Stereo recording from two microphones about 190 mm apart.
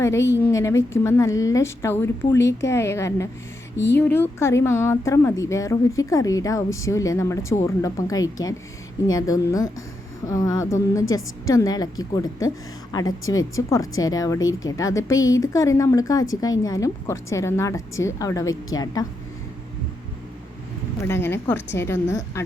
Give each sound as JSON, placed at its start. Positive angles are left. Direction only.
{"t": 0.0, "sound": "a woman's voice", "side_deg": 15}
{"t": 21.1, "sound": "a woman's voice", "side_deg": 10}